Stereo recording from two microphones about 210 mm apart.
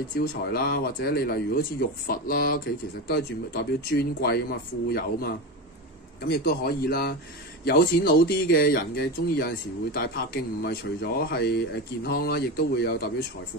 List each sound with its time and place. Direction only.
0.2 s speech: 45° left (ahead or behind)